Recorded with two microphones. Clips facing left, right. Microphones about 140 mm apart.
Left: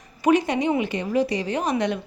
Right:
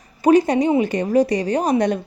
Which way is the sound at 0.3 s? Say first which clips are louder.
Right 5 dB; 35° right (ahead or behind).